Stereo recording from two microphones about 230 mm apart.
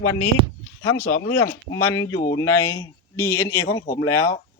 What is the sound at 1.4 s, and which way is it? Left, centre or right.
Speech, centre.